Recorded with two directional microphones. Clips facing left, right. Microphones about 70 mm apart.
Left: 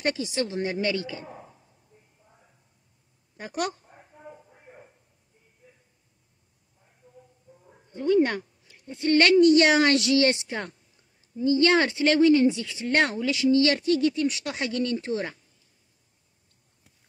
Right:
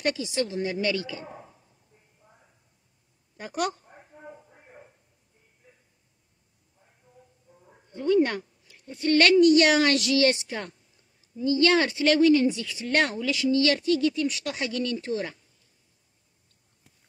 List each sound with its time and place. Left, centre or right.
0.0 s a woman's voice: left
3.4 s speech: centre
4.3 s a sound: centre
7.9 s a woman's voice: centre
13.3 s a woman's voice: left